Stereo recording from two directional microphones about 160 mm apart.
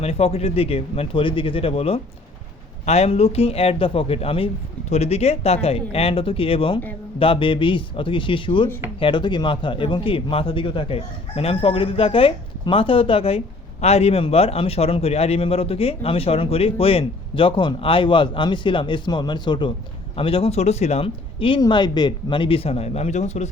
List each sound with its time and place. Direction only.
0.0 s a man's voice: 40° left (ahead or behind)